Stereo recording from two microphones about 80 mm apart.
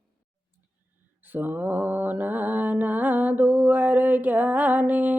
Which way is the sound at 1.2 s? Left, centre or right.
Right.